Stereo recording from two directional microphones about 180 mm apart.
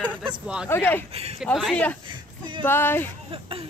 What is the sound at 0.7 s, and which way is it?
Speech, 10° left (ahead or behind).